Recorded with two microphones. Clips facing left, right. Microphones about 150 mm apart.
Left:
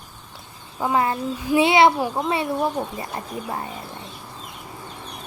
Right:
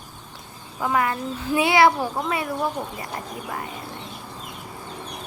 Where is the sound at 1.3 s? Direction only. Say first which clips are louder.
Left 2 dB; 15° left (ahead or behind).